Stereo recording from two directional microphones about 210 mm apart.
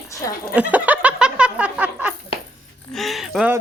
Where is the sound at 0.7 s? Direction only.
5° right (ahead or behind).